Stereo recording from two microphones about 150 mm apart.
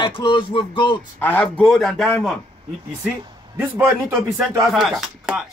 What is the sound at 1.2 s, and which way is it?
A man's voice, 10° left (ahead or behind).